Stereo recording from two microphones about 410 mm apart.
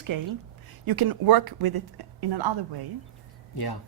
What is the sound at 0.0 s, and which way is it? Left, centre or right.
A woman's voice, right.